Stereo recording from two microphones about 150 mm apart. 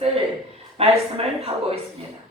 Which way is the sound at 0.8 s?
40° right (ahead or behind).